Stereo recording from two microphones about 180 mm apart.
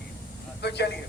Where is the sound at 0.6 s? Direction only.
65° left (ahead or behind).